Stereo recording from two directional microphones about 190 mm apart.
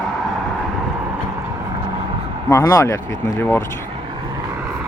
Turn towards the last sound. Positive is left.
turn(degrees=10)  # may be behind; listen again after turning